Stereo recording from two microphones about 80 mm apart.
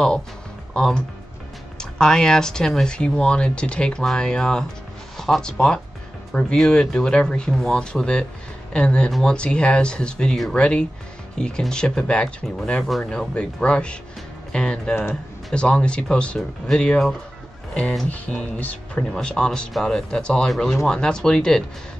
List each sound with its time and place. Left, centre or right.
0.7 s speech: centre